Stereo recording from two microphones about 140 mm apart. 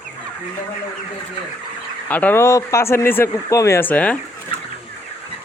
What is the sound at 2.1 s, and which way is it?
Speech, 15° left (ahead or behind).